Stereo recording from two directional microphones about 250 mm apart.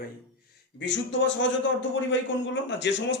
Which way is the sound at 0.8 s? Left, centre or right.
Left.